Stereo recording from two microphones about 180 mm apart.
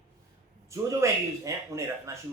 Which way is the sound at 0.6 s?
15° right (ahead or behind).